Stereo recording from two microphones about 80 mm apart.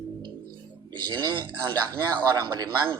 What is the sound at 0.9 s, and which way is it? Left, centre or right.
Speech, right.